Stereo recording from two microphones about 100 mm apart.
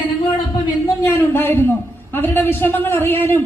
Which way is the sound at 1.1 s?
20° left (ahead or behind).